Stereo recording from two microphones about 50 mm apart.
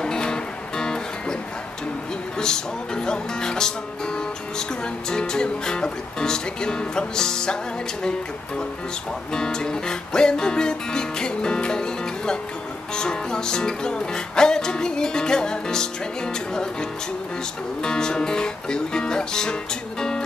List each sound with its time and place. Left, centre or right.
0.0 s music: centre
2.3 s music: centre
17.8 s music: centre